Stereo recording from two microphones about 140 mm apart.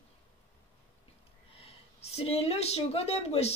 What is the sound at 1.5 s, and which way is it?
Speech, 45° left (ahead or behind).